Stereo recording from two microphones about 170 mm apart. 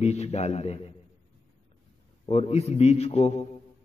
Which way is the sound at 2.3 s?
40° left (ahead or behind).